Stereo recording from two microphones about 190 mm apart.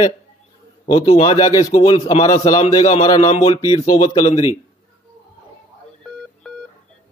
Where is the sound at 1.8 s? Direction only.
30° left (ahead or behind).